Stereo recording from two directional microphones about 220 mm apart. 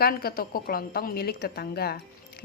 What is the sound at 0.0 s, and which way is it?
A woman's voice, 45° left (ahead or behind).